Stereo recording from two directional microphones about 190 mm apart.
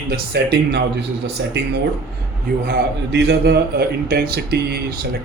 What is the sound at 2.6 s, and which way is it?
Speech, 60° right (ahead or behind).